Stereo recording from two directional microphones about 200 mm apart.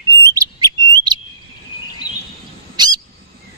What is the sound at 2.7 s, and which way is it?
Owl, 20° right (ahead or behind).